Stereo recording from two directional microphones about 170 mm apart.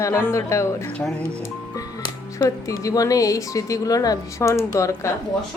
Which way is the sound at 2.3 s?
20° left (ahead or behind).